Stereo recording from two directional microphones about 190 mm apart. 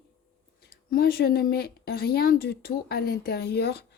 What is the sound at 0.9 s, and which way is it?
A woman's voice, 50° left (ahead or behind).